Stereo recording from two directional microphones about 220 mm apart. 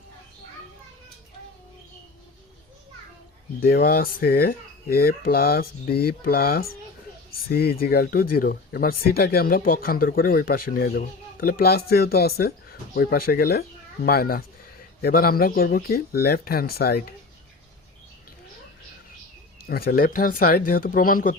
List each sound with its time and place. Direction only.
3.6 s speech: 45° left (ahead or behind)
19.6 s speech: 45° left (ahead or behind)